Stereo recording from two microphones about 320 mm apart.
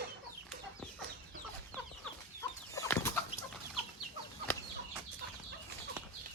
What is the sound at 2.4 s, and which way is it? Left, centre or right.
Chicken, centre.